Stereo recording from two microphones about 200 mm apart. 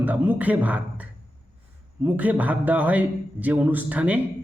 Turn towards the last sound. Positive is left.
turn(degrees=-10)  # may be behind; listen again after turning